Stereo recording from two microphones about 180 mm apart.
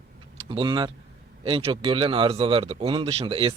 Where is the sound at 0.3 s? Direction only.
25° right (ahead or behind).